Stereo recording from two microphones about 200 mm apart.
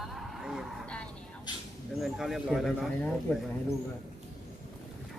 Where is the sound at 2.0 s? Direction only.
Centre (ahead or behind).